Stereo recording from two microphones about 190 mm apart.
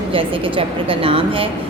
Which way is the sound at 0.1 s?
30° right (ahead or behind).